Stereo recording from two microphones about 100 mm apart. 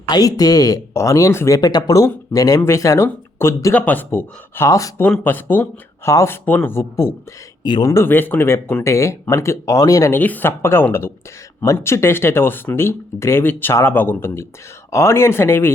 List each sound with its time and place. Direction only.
0.1 s speech: 40° left (ahead or behind)
5.0 s speech: 15° left (ahead or behind); by 8.0 s 30° left (ahead or behind)
8.0 s speech: 20° left (ahead or behind); by 10.1 s 35° left (ahead or behind)
10.1 s speech: 15° left (ahead or behind)